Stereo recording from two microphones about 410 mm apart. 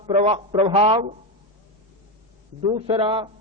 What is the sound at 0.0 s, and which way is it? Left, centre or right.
Speech, centre.